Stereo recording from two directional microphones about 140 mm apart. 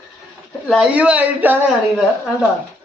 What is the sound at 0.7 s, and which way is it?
Speech, 5° right (ahead or behind).